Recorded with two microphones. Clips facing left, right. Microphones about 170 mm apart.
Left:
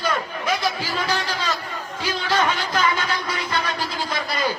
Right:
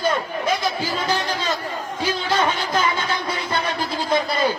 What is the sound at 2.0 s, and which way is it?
Music, 25° right (ahead or behind).